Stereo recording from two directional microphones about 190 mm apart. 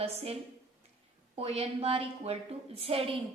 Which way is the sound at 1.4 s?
30° right (ahead or behind).